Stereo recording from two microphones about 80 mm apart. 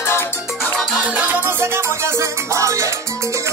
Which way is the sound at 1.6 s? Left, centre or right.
Right.